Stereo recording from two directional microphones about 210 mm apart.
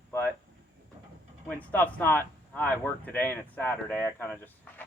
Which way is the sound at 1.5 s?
5° left (ahead or behind).